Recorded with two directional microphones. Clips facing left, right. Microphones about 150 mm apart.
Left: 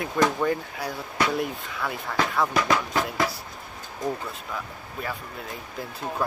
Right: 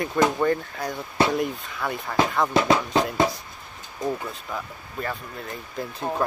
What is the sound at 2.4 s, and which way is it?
Speech, 25° right (ahead or behind).